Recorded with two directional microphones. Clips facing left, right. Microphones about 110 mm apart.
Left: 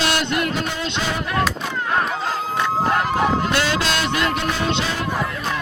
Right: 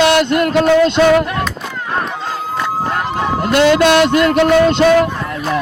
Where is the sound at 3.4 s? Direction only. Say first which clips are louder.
Right 10 dB; 50° right (ahead or behind).